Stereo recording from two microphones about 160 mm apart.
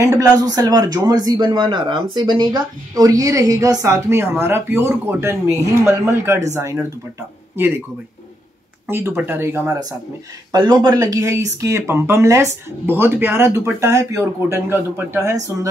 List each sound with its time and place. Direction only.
0.0 s speech: 20° right (ahead or behind)
8.8 s speech: 15° right (ahead or behind)
10.5 s speech: 25° right (ahead or behind)